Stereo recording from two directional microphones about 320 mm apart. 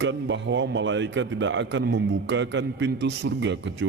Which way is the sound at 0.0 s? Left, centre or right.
Right.